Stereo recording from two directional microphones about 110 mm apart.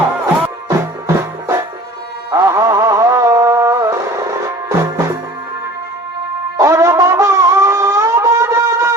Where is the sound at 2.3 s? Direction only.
30° right (ahead or behind).